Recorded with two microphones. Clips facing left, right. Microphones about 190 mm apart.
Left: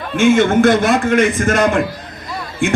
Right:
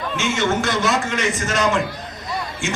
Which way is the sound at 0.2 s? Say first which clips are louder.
Left 11 dB; 55° left (ahead or behind).